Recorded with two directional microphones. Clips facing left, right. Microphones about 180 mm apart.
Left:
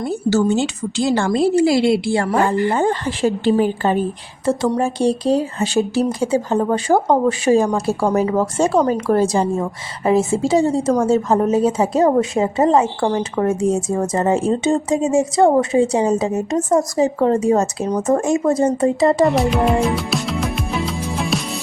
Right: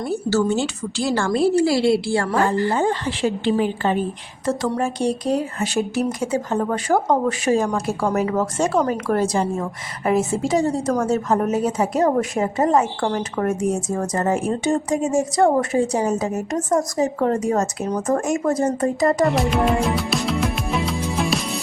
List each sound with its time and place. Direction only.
0.0 s a woman's voice: 20° left (ahead or behind)
2.6 s a woman's voice: 50° left (ahead or behind)
4.8 s a woman's voice: 30° left (ahead or behind)
19.3 s music: centre (ahead or behind)